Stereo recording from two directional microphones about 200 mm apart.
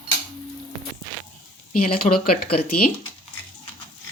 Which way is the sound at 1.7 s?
45° left (ahead or behind).